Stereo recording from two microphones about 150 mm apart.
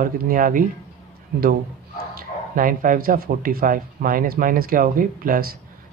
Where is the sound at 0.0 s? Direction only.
65° right (ahead or behind).